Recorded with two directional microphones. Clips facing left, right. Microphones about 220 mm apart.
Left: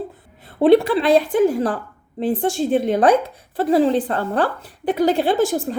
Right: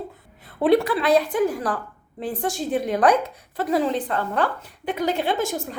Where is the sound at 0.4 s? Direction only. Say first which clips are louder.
Left 5 dB; 25° left (ahead or behind).